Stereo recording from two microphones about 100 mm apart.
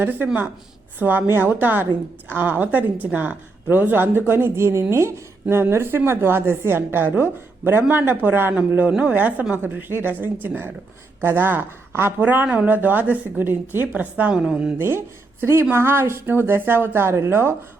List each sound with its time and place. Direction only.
0.0 s a woman's voice: 20° right (ahead or behind)
14.8 s a woman's voice: 25° right (ahead or behind)